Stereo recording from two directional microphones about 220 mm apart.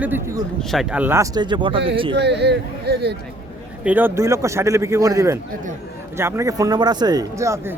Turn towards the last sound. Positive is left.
turn(degrees=-15)  # may be behind; listen again after turning